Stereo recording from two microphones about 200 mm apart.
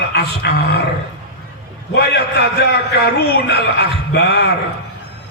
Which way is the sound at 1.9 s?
60° left (ahead or behind).